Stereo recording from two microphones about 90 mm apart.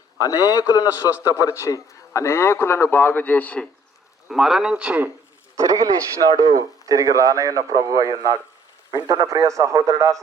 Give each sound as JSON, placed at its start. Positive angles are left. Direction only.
{"t": 0.2, "sound": "a man's voice", "side_deg": 40}
{"t": 4.3, "sound": "a man's voice", "side_deg": -5}
{"t": 5.5, "sound": "a man's voice", "side_deg": -40}